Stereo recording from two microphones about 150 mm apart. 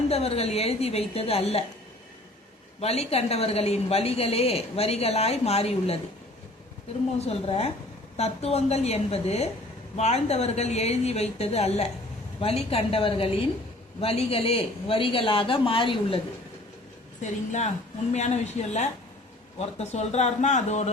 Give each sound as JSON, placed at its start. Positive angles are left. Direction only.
{"t": 0.1, "sound": "a woman's voice", "side_deg": 40}
{"t": 2.8, "sound": "a woman's voice", "side_deg": 45}
{"t": 7.2, "sound": "a woman's voice", "side_deg": 40}
{"t": 17.2, "sound": "a woman's voice", "side_deg": 50}